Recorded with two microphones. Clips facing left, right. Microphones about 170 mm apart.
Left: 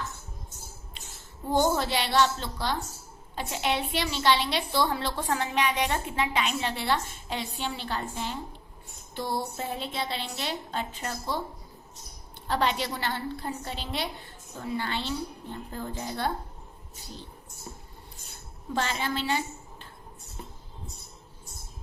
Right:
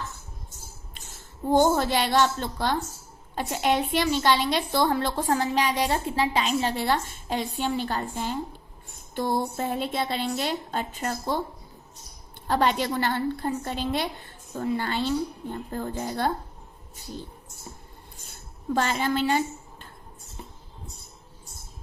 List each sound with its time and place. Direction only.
1.5 s a woman's voice: 50° right (ahead or behind)
12.5 s a woman's voice: 45° right (ahead or behind)
18.7 s a woman's voice: 45° right (ahead or behind)